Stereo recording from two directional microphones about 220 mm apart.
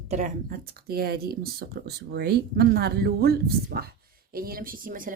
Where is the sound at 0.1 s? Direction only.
35° right (ahead or behind).